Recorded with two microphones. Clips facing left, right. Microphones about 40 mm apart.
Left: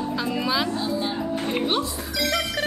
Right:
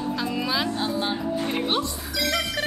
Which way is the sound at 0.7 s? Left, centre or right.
Right.